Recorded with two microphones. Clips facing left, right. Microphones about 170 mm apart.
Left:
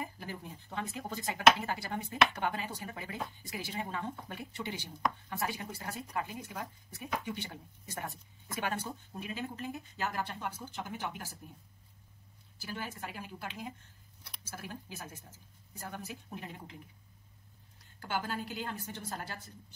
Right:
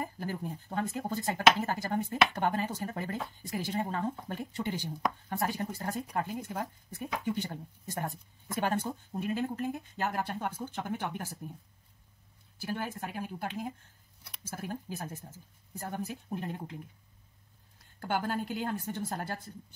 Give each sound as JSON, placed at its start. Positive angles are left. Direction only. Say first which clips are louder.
{"t": 0.0, "sound": "speech", "louder": "right 6 dB", "side_deg": -45}
{"t": 12.5, "sound": "speech", "louder": "right 6 dB", "side_deg": -55}
{"t": 18.0, "sound": "speech", "louder": "right 5 dB", "side_deg": -50}